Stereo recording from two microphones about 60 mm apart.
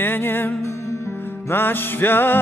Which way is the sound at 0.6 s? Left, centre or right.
Left.